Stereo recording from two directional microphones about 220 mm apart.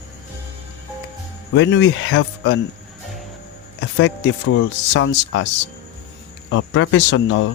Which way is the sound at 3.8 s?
55° left (ahead or behind).